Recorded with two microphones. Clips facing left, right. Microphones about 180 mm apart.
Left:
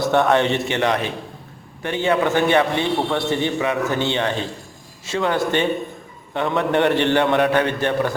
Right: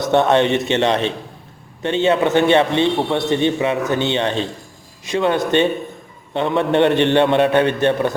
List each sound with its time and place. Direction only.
0.0 s a man's voice: 20° right (ahead or behind)